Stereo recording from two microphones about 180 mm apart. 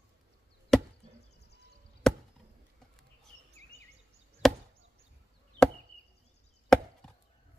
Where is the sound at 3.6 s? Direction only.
35° right (ahead or behind).